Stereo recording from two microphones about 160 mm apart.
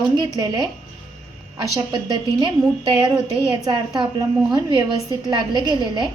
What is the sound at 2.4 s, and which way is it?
A woman's voice, 25° right (ahead or behind).